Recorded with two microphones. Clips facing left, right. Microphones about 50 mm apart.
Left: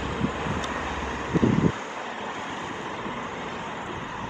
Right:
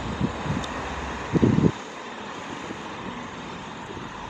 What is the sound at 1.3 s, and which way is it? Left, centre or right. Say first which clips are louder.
Vehicle: right 2 dB; left.